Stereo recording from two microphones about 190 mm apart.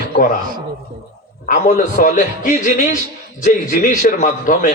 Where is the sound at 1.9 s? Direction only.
40° left (ahead or behind).